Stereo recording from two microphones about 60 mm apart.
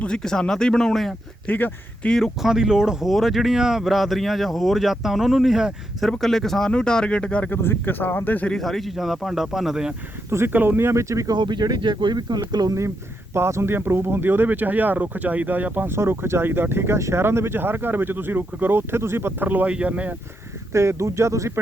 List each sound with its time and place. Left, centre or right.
0.0 s speech: centre
1.5 s speech: left
2.0 s speech: centre
2.4 s speech: centre
6.0 s speech: centre
7.5 s speech: left
8.5 s speech: centre
10.2 s speech: right
10.5 s speech: right
12.5 s speech: right
13.3 s speech: right
16.0 s speech: right
19.5 s speech: right
20.7 s speech: right